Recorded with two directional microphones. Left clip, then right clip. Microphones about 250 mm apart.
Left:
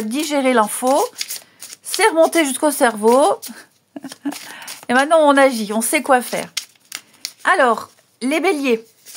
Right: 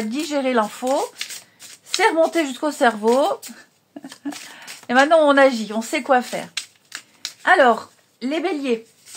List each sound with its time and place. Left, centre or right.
0.1 s speech: left